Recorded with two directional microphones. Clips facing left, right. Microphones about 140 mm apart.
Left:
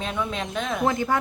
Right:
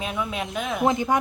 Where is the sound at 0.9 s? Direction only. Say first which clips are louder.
Right 3 dB; 20° right (ahead or behind).